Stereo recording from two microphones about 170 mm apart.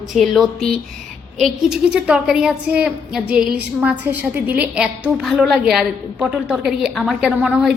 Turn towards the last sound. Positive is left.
turn(degrees=-5)  # may be behind; listen again after turning